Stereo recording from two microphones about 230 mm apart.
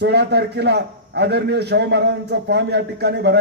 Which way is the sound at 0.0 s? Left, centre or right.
Right.